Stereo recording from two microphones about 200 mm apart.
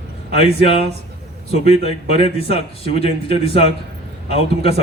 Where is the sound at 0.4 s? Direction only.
30° left (ahead or behind).